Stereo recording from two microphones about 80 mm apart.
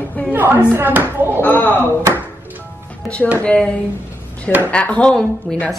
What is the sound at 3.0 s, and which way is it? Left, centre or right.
Speech, centre.